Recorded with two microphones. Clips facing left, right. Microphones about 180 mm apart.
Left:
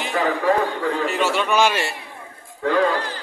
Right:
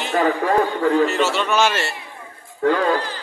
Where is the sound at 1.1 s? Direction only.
10° left (ahead or behind).